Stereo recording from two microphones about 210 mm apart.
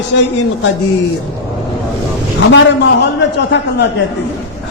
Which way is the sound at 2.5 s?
55° left (ahead or behind).